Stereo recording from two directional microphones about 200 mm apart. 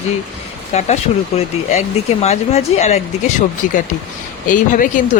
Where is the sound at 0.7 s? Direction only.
35° left (ahead or behind).